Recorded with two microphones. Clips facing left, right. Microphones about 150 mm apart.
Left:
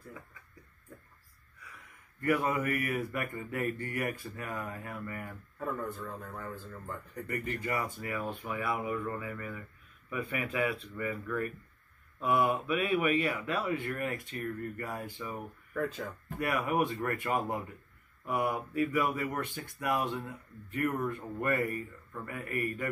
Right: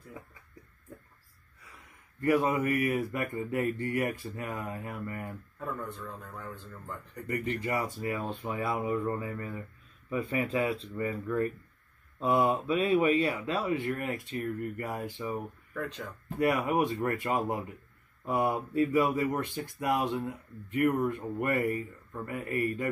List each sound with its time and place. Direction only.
2.2 s speech: 20° right (ahead or behind)
5.6 s a man's voice: 5° left (ahead or behind)
7.2 s speech: 25° right (ahead or behind)
15.7 s a man's voice: 5° left (ahead or behind)
16.3 s speech: 25° right (ahead or behind)